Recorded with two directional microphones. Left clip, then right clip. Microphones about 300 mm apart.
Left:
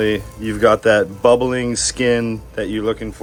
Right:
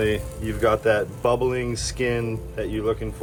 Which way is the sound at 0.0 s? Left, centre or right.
Left.